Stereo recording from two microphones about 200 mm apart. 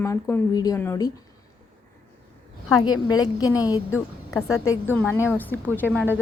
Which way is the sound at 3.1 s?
20° left (ahead or behind).